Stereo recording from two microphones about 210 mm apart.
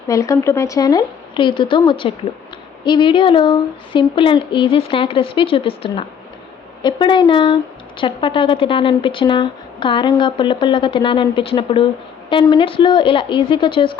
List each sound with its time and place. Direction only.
0.1 s speech: 15° left (ahead or behind)